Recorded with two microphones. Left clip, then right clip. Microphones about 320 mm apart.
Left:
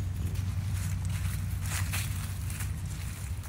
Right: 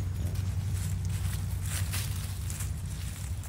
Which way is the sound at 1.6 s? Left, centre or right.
Centre.